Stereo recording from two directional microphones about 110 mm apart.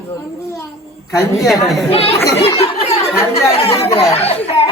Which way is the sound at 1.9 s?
65° left (ahead or behind).